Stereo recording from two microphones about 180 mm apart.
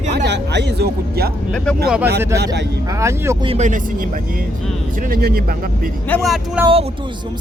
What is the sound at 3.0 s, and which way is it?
Speech, 15° right (ahead or behind).